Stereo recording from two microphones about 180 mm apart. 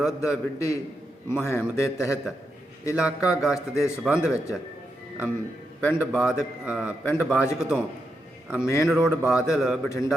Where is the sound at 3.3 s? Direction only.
5° right (ahead or behind).